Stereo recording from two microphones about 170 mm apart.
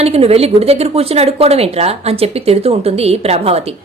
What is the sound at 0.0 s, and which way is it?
A woman's voice, 35° right (ahead or behind).